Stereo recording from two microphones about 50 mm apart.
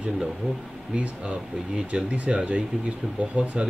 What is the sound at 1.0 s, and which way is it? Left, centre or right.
Speech, right.